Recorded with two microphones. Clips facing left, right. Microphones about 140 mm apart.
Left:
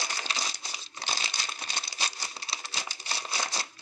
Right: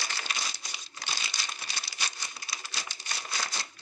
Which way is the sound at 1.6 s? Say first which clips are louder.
Left 3 dB; 25° left (ahead or behind).